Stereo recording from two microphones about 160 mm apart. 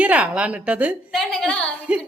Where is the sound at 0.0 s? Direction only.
10° right (ahead or behind).